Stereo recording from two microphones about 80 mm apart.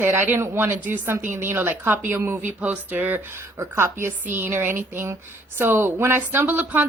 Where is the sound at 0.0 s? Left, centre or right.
Right.